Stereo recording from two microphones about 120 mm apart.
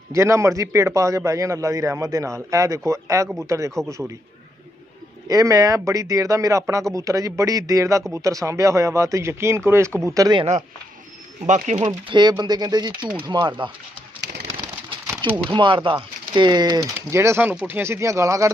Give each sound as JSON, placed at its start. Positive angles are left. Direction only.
{"t": 0.1, "sound": "a man's voice", "side_deg": -25}
{"t": 5.3, "sound": "a man's voice", "side_deg": -30}
{"t": 11.4, "sound": "speech", "side_deg": -85}
{"t": 12.1, "sound": "speech", "side_deg": -40}
{"t": 15.2, "sound": "speech", "side_deg": -40}
{"t": 17.1, "sound": "a man's voice", "side_deg": -20}